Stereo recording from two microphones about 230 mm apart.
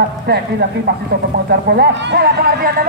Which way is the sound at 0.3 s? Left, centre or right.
Right.